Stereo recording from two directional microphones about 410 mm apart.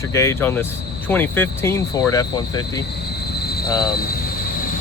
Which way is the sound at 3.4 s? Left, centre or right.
Left.